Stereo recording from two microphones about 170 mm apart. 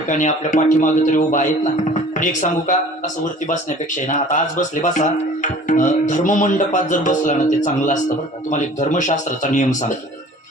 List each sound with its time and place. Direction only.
0.1 s speech: 50° left (ahead or behind)